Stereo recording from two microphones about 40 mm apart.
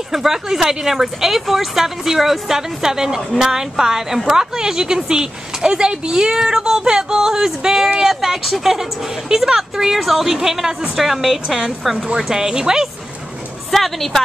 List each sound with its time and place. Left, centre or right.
0.1 s speech: centre
13.7 s speech: centre